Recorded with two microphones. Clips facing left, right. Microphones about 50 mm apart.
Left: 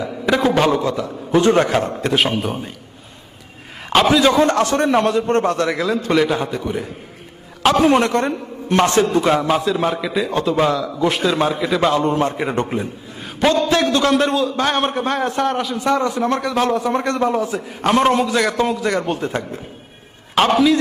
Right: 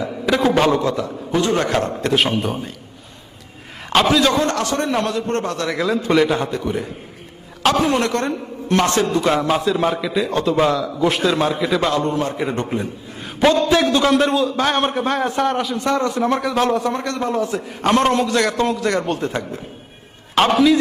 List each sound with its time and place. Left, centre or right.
0.0 s a man's voice: centre
3.8 s a man's voice: centre; by 5.7 s left
5.7 s a man's voice: centre
7.8 s a man's voice: left
8.3 s a man's voice: centre
12.0 s a man's voice: left
13.2 s a sound: centre
13.7 s a man's voice: centre
16.9 s a man's voice: left; by 20.7 s centre